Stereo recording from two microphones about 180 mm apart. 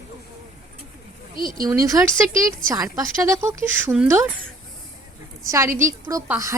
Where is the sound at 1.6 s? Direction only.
20° right (ahead or behind).